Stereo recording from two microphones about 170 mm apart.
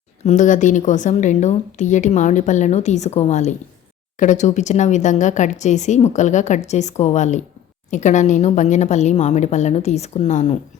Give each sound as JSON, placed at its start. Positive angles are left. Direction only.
{"t": 0.3, "sound": "a woman's voice", "side_deg": 45}